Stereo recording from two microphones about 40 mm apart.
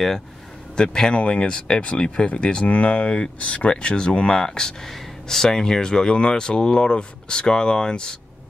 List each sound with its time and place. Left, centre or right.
0.7 s speech: centre